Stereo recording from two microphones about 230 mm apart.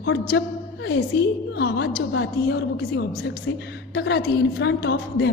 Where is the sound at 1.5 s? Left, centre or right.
Left.